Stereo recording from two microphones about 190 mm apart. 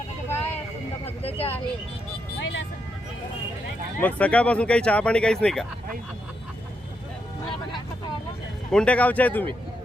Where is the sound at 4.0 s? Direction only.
10° left (ahead or behind).